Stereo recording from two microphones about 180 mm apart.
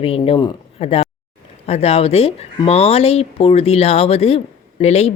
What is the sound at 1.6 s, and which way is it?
A woman's voice, 35° left (ahead or behind).